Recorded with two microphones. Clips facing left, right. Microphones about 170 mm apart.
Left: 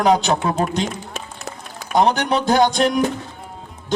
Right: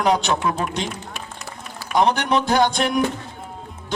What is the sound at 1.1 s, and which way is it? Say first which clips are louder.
Run: left 3 dB; 45° left (ahead or behind).